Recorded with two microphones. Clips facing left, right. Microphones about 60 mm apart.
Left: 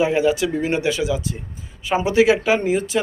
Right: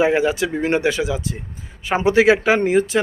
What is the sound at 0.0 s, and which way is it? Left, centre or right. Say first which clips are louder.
Speech: right 1 dB; right.